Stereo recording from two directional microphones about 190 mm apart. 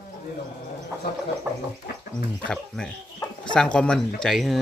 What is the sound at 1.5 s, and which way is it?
Chicken, 10° right (ahead or behind).